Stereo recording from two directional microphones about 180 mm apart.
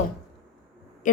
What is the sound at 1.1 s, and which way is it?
Speech, 45° left (ahead or behind).